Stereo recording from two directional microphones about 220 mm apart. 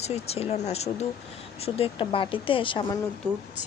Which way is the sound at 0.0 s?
30° left (ahead or behind).